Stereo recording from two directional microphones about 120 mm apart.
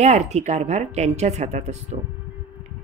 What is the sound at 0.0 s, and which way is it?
A woman's voice, 70° right (ahead or behind).